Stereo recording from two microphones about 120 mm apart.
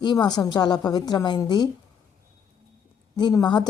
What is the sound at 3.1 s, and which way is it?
Speech, 35° left (ahead or behind).